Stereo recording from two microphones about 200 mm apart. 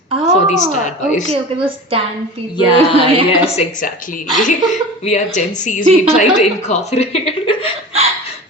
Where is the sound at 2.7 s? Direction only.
25° right (ahead or behind).